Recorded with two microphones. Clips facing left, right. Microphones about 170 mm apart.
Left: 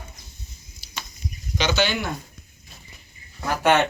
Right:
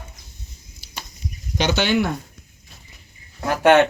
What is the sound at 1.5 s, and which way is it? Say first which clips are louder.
Speech: right 4 dB; 55° right (ahead or behind).